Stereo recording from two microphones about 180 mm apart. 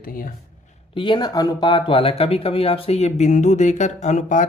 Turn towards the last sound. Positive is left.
turn(degrees=40)  # may be behind; listen again after turning